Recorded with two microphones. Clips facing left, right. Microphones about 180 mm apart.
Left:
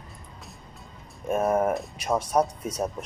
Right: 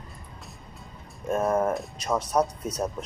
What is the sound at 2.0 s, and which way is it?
Speech, 5° left (ahead or behind).